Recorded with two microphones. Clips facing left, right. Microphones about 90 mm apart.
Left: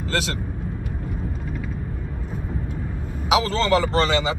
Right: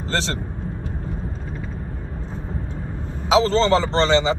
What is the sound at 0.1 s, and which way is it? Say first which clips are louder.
Speech: right 1 dB; 30° right (ahead or behind).